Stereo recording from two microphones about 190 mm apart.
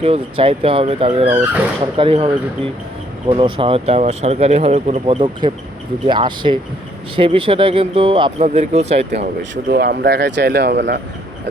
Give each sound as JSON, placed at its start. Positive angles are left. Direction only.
{"t": 0.0, "sound": "speech", "side_deg": -30}
{"t": 9.1, "sound": "speech", "side_deg": -60}